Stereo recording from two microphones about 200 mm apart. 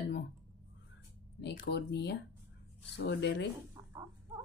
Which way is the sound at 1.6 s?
55° left (ahead or behind).